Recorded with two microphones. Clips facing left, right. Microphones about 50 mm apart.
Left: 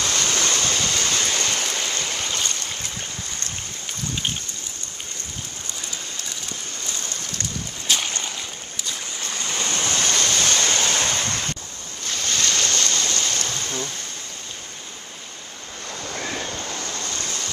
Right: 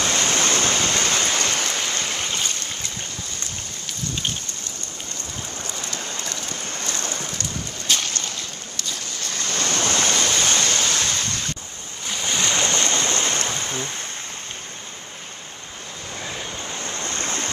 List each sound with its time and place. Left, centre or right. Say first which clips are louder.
0.0 s waterfall: right 2 dB; right
7.8 s a sound: even; centre
8.1 s waves: even; centre
9.7 s waves: right 3 dB; right
10.1 s waves: right 1 dB; centre
10.6 s waves: left 1 dB; centre
12.0 s ocean: right 1 dB; centre
16.2 s waves: left 3 dB; centre
16.6 s stream: right 1 dB; right